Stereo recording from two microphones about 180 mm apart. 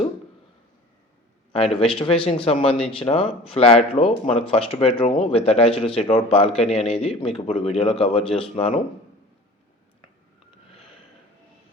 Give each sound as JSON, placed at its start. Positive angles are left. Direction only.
{"t": 1.5, "sound": "speech", "side_deg": 35}